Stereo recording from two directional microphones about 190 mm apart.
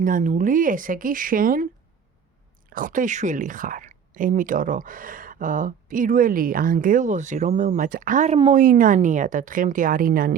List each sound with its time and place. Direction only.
0.0 s speech: 45° right (ahead or behind)
2.6 s speech: 45° right (ahead or behind)
8.6 s speech: 45° right (ahead or behind)